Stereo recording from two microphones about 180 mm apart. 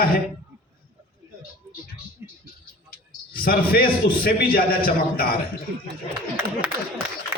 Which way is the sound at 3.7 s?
55° left (ahead or behind).